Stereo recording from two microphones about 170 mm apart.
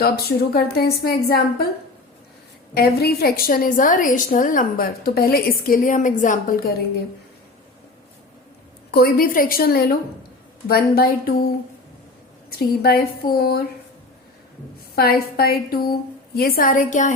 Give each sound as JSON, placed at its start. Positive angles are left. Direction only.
{"t": 0.0, "sound": "a woman's voice", "side_deg": 65}
{"t": 2.7, "sound": "a woman's voice", "side_deg": 65}
{"t": 8.9, "sound": "a woman's voice", "side_deg": 65}
{"t": 14.9, "sound": "a woman's voice", "side_deg": 65}